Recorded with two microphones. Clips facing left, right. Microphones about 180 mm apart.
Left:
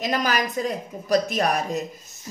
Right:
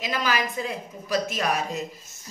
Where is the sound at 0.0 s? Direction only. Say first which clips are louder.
Left 3 dB; 45° left (ahead or behind).